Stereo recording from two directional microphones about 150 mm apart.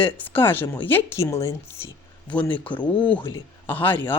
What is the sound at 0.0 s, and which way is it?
Speech, 10° left (ahead or behind).